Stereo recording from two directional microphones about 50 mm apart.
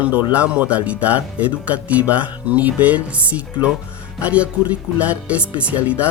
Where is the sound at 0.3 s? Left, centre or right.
Right.